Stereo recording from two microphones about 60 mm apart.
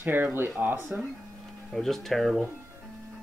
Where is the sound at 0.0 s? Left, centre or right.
Right.